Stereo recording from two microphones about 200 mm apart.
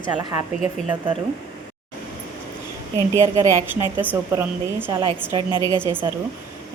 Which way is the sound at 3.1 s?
15° right (ahead or behind).